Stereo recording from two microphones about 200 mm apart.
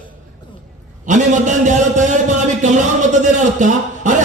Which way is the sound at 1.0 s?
40° right (ahead or behind).